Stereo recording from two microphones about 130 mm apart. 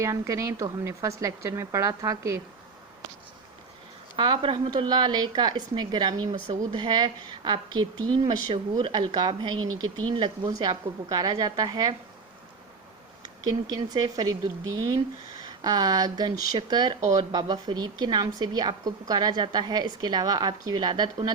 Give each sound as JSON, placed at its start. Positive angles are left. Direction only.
{"t": 0.0, "sound": "a woman's voice", "side_deg": -25}
{"t": 4.2, "sound": "a woman's voice", "side_deg": -40}
{"t": 13.2, "sound": "a woman's voice", "side_deg": -35}